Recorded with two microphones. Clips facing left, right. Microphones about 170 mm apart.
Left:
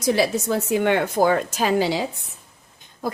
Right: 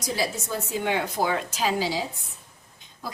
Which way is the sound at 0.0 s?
65° left (ahead or behind).